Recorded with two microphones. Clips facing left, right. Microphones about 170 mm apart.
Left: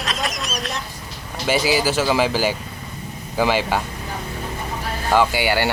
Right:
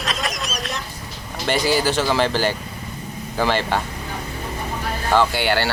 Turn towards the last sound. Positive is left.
turn(degrees=10)  # may be behind; listen again after turning